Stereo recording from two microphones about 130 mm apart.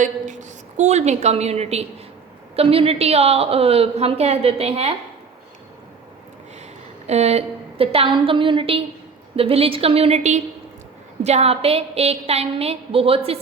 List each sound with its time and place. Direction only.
0.0 s a woman's voice: 70° right (ahead or behind); by 4.9 s 50° right (ahead or behind)
7.1 s a woman's voice: 55° right (ahead or behind)